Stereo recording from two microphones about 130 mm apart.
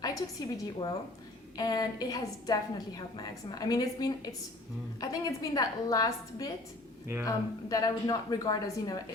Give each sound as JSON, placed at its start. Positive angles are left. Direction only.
{"t": 0.0, "sound": "a woman's voice", "side_deg": 30}